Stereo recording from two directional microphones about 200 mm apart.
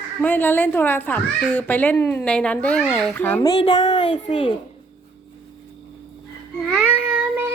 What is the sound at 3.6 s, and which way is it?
Speech, 30° left (ahead or behind).